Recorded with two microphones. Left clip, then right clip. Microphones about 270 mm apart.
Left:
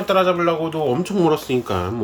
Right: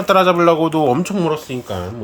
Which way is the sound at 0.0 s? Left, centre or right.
Right.